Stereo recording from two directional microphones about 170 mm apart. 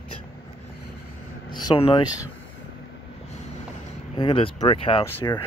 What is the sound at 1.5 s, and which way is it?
Speech, 30° left (ahead or behind).